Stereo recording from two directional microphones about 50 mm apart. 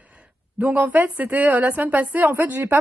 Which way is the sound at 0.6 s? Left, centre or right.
Right.